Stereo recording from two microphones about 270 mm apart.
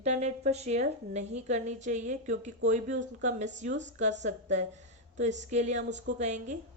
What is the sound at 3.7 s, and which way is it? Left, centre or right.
Speech, right.